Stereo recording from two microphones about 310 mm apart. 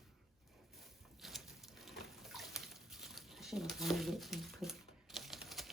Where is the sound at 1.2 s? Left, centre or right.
Centre.